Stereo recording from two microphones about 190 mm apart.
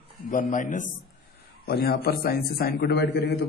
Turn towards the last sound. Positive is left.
turn(degrees=60)  # may be behind; listen again after turning